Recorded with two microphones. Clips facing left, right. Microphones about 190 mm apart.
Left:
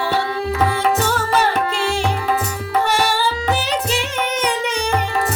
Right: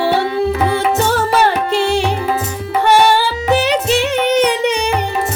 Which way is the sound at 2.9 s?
65° right (ahead or behind).